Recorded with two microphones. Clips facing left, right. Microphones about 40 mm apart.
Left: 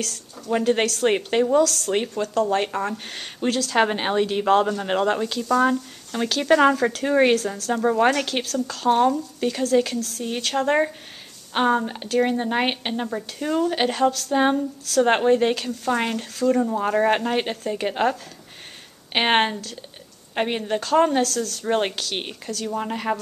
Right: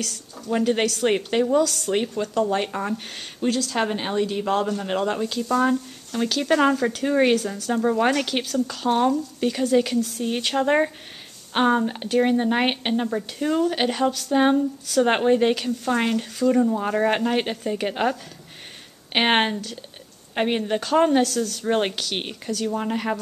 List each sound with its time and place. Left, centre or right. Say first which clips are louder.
0.0 s speech: left 1 dB; centre
1.6 s a woman's voice: left 2 dB; centre
2.4 s speech: left 1 dB; centre
3.7 s speech: left 3 dB; left; by 9.6 s centre
9.6 s a woman's voice: right 1 dB; centre
19.1 s a woman's voice: even; centre
21.6 s speech: left 1 dB; centre